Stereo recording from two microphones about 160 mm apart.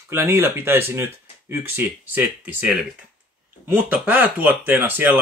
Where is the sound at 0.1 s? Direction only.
15° right (ahead or behind).